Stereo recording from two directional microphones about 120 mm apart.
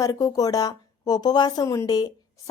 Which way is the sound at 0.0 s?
30° left (ahead or behind).